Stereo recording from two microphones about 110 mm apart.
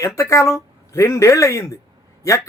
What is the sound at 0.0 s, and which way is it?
A man's voice, 30° left (ahead or behind).